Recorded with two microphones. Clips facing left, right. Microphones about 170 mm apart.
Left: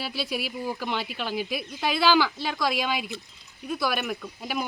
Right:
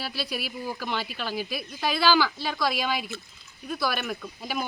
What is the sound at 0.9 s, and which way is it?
Speech, 15° left (ahead or behind).